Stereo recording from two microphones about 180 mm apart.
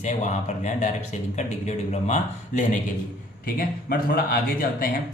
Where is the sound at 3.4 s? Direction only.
55° left (ahead or behind).